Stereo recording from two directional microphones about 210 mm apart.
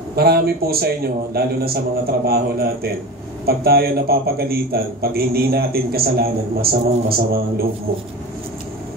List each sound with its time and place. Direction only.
0.1 s a man's voice: 45° right (ahead or behind)